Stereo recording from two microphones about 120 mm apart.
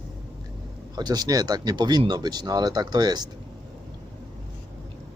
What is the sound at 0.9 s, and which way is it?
Speech, 35° right (ahead or behind).